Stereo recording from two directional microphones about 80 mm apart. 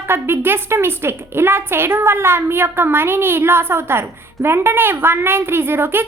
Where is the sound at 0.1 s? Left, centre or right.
Right.